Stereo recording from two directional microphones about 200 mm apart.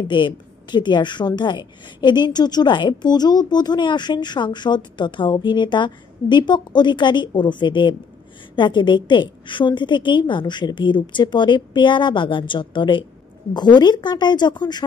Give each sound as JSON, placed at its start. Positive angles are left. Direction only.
{"t": 0.1, "sound": "a woman's voice", "side_deg": 25}